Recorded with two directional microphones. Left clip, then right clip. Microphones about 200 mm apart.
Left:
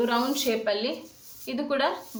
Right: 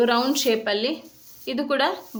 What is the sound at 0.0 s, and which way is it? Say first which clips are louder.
A woman's voice: right 5 dB; 40° right (ahead or behind).